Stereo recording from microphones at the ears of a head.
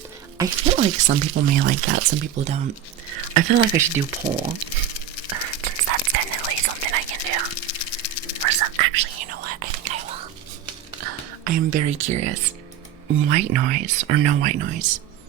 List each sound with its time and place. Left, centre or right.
0.3 s speech: right
5.3 s whispering: right
7.5 s dog: left
8.4 s whispering: right
13.1 s speech: right